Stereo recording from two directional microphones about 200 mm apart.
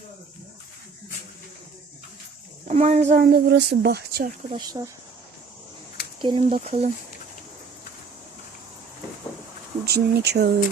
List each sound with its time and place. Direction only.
2.6 s speech: 35° right (ahead or behind)
3.2 s speech: 50° right (ahead or behind)
4.4 s speech: 20° right (ahead or behind)
6.2 s speech: 30° right (ahead or behind)
9.8 s speech: 55° right (ahead or behind)